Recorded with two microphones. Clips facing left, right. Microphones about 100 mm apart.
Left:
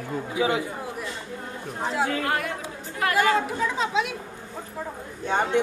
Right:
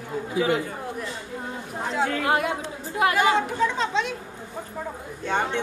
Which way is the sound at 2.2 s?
20° right (ahead or behind).